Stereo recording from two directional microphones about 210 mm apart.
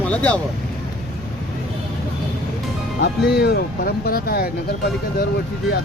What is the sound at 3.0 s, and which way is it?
Speech, 50° left (ahead or behind).